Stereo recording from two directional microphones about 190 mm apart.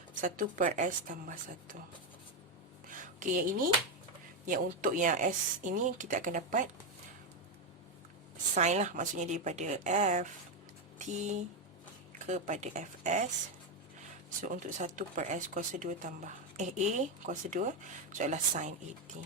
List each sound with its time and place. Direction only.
0.2 s speech: 45° right (ahead or behind)
2.9 s a sound: 45° right (ahead or behind)
4.4 s speech: 45° right (ahead or behind)
8.5 s speech: 40° right (ahead or behind)
14.4 s speech: 40° right (ahead or behind)